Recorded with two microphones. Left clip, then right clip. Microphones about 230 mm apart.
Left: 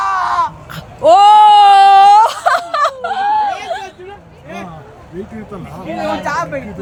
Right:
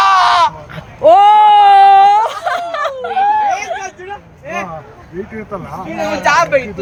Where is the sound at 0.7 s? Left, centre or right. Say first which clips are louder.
Left 1 dB; centre.